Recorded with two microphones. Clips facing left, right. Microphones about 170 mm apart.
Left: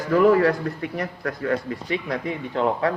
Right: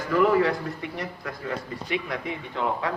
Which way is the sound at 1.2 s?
65° left (ahead or behind).